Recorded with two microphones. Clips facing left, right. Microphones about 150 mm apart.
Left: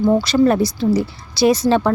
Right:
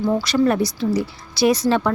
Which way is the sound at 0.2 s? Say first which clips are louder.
Left 3 dB; 25° left (ahead or behind).